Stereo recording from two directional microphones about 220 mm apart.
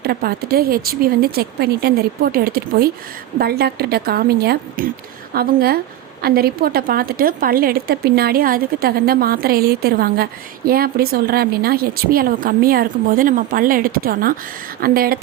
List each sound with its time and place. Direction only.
0.0 s a woman's voice: 45° right (ahead or behind)